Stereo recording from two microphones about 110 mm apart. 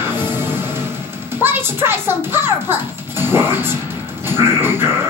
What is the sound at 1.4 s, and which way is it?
A child's voice, 20° right (ahead or behind).